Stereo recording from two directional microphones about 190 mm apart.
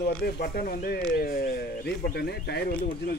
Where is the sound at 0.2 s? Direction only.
55° left (ahead or behind).